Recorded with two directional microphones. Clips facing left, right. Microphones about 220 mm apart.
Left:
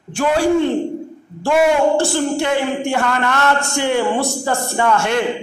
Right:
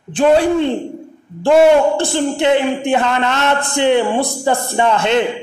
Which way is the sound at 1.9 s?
20° right (ahead or behind).